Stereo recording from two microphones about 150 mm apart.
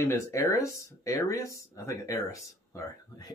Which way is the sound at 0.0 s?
20° left (ahead or behind).